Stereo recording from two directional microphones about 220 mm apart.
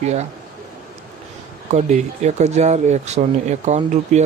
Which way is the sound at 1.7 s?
30° right (ahead or behind).